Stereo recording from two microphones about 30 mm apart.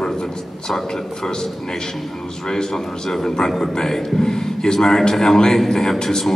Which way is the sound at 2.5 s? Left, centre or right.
Centre.